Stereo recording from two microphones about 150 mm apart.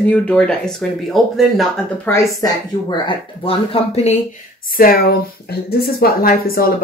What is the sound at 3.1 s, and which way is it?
Speech, 40° left (ahead or behind).